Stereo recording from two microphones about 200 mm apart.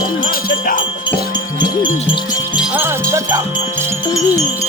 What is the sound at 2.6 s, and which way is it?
Music, 5° right (ahead or behind).